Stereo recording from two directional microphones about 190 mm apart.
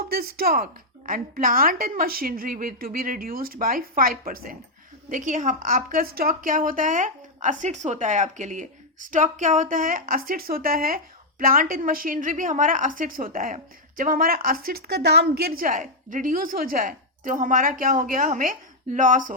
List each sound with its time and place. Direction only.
0.1 s a woman's voice: 55° right (ahead or behind)